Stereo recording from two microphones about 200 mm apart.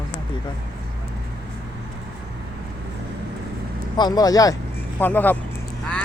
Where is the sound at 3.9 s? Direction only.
20° left (ahead or behind).